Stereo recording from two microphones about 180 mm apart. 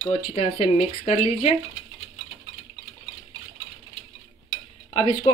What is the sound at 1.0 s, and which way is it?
Speech, 30° left (ahead or behind).